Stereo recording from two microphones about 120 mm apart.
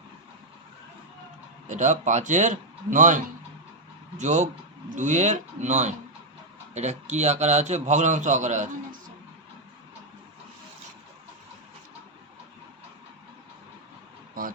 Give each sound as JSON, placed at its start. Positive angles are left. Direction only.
{"t": 1.6, "sound": "speech", "side_deg": -90}
{"t": 4.2, "sound": "a man's voice", "side_deg": -85}